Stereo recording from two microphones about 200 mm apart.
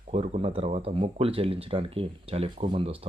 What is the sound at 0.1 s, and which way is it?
Speech, 30° right (ahead or behind).